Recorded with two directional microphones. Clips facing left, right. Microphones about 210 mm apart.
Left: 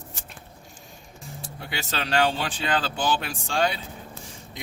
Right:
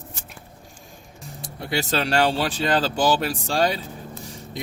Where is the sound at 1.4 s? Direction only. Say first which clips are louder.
Right 9 dB; 40° right (ahead or behind).